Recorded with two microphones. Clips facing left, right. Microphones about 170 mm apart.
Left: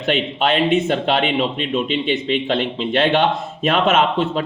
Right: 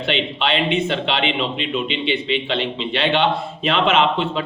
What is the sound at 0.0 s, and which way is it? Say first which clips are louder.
Speech: left 3 dB; 45° left (ahead or behind).